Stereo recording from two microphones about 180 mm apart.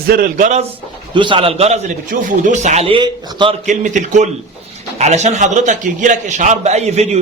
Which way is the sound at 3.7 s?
40° right (ahead or behind).